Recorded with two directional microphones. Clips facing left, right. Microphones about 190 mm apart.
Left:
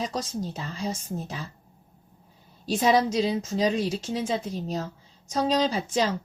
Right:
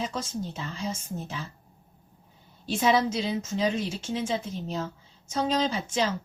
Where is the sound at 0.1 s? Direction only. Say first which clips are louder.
Left 2 dB; 35° left (ahead or behind).